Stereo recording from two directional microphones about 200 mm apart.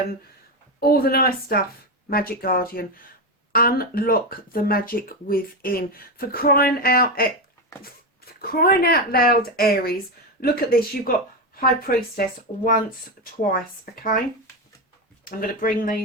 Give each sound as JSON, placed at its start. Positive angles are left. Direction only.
{"t": 0.8, "sound": "speech", "side_deg": 50}
{"t": 15.2, "sound": "speech", "side_deg": 45}